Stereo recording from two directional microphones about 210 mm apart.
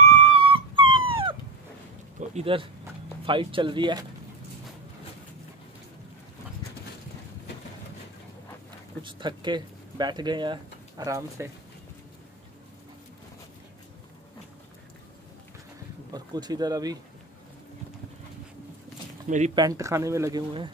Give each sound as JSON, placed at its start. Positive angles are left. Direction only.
{"t": 0.3, "sound": "dog", "side_deg": -25}
{"t": 2.1, "sound": "a sound", "side_deg": -30}
{"t": 3.3, "sound": "speech", "side_deg": -25}
{"t": 9.0, "sound": "speech", "side_deg": -20}
{"t": 16.1, "sound": "speech", "side_deg": -20}
{"t": 19.2, "sound": "speech", "side_deg": -35}
{"t": 19.5, "sound": "speech", "side_deg": -15}